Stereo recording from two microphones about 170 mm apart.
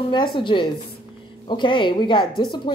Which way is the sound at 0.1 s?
30° left (ahead or behind).